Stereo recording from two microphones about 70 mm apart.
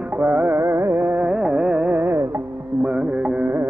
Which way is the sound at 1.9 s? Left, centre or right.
Right.